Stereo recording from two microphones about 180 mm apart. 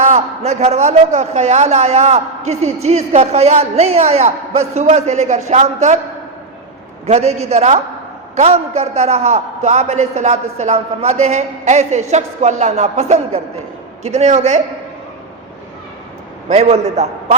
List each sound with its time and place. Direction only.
0.0 s a man's voice: 40° right (ahead or behind)
7.1 s a man's voice: 35° right (ahead or behind)
16.5 s a man's voice: 35° right (ahead or behind)